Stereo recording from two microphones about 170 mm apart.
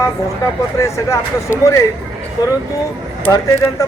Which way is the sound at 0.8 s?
15° left (ahead or behind).